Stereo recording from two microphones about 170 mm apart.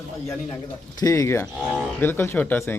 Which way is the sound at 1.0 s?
20° left (ahead or behind).